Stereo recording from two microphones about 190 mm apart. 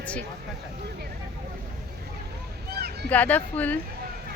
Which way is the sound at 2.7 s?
55° right (ahead or behind).